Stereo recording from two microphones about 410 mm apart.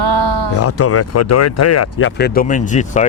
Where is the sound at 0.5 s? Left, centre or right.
Left.